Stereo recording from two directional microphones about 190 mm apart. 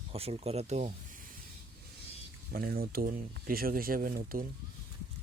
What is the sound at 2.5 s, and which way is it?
Speech, 55° right (ahead or behind).